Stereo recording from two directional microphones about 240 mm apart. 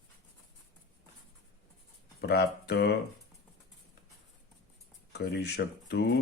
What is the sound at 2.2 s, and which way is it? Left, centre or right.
Speech, left.